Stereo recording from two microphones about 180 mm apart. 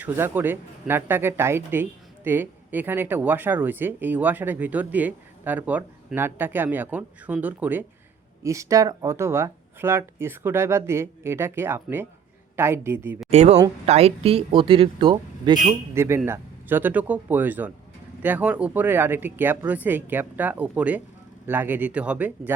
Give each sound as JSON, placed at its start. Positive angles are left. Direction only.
{"t": 0.0, "sound": "speech", "side_deg": -10}
{"t": 13.3, "sound": "speech", "side_deg": -40}